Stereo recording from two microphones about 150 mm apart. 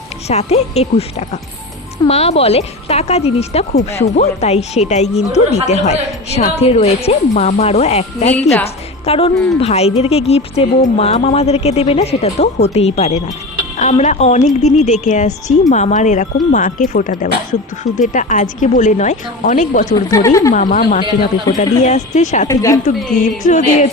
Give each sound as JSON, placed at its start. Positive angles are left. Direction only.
{"t": 0.3, "sound": "a woman's voice", "side_deg": 45}
{"t": 19.9, "sound": "speech", "side_deg": 20}
{"t": 20.5, "sound": "speech", "side_deg": 60}
{"t": 21.0, "sound": "speech", "side_deg": 30}
{"t": 21.6, "sound": "a woman's voice", "side_deg": 50}
{"t": 22.4, "sound": "speech", "side_deg": 20}
{"t": 23.5, "sound": "a woman's voice", "side_deg": 50}